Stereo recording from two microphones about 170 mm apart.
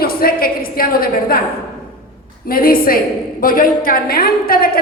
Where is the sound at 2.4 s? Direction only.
60° left (ahead or behind).